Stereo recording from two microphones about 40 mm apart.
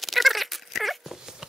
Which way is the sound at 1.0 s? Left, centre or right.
Centre.